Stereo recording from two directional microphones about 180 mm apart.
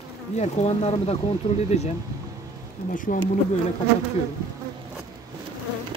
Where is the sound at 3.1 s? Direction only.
50° left (ahead or behind).